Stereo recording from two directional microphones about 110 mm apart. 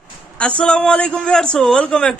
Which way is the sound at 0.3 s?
10° left (ahead or behind).